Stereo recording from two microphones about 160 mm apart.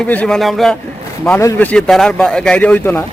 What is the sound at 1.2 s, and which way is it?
Speech, 10° left (ahead or behind).